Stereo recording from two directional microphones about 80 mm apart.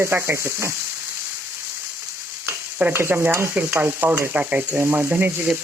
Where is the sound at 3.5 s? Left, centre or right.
Right.